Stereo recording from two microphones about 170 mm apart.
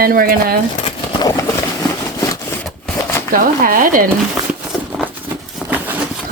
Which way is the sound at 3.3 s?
55° right (ahead or behind).